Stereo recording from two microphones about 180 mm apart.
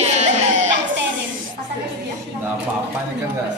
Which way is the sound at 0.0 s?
40° right (ahead or behind).